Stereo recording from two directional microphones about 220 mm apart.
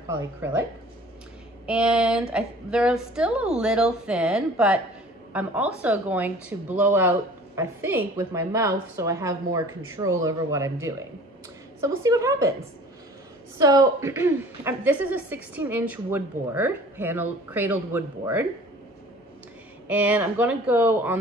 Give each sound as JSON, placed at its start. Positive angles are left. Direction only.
{"t": 0.2, "sound": "a woman's voice", "side_deg": -10}
{"t": 1.7, "sound": "a woman's voice", "side_deg": -5}
{"t": 12.0, "sound": "a woman's voice", "side_deg": -15}
{"t": 13.6, "sound": "a woman's voice", "side_deg": -15}
{"t": 19.9, "sound": "a woman's voice", "side_deg": -5}